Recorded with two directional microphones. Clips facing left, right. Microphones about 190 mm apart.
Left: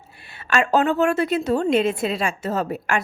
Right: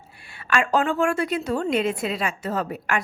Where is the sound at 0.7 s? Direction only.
25° left (ahead or behind).